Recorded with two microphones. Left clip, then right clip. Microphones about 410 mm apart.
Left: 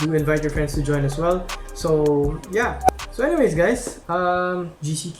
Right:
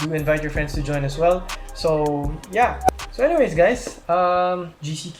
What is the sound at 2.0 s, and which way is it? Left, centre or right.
Speech, centre.